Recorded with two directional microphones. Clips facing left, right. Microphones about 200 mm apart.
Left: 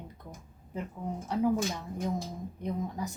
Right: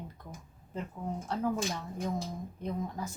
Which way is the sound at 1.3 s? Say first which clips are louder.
Left 5 dB; 15° left (ahead or behind).